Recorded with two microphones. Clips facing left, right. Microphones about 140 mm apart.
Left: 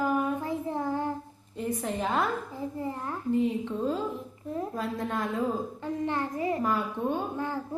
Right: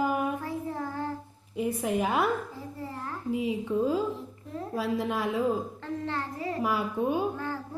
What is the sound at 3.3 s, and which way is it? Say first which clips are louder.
A woman's voice: left 1 dB; 10° right (ahead or behind).